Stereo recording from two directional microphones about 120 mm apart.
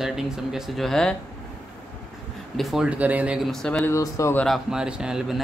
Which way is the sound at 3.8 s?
25° left (ahead or behind).